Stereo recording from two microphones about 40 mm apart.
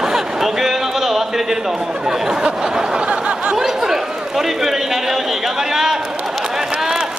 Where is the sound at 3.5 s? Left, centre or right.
Centre.